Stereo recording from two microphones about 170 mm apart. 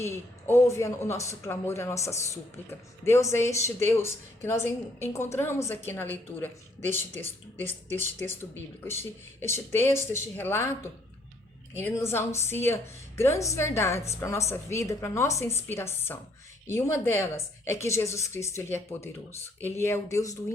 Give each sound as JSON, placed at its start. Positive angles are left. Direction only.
{"t": 0.0, "sound": "speech", "side_deg": 15}
{"t": 8.2, "sound": "speech", "side_deg": 10}
{"t": 11.8, "sound": "speech", "side_deg": 15}